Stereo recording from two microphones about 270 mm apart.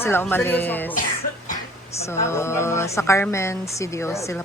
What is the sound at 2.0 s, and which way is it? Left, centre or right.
A woman's voice, centre.